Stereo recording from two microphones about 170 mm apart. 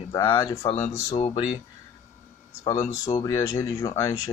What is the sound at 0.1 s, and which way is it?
Speech, 25° left (ahead or behind).